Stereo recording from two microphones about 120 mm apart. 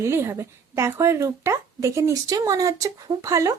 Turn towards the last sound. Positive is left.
turn(degrees=-25)  # may be behind; listen again after turning